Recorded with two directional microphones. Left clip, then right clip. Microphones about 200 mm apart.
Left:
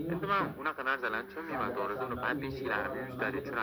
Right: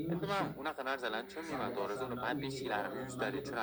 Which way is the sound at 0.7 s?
50° right (ahead or behind).